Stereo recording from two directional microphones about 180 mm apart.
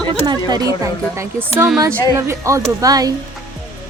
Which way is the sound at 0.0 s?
25° right (ahead or behind).